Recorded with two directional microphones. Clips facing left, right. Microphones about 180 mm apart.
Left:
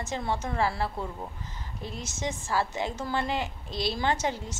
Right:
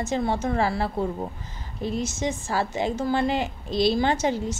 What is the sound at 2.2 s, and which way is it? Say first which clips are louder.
A woman's voice: left 1 dB; 20° right (ahead or behind).